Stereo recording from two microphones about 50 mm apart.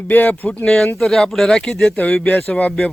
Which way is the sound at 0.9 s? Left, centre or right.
Centre.